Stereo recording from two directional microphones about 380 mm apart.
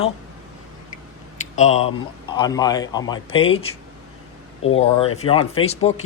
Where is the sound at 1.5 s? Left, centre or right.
Centre.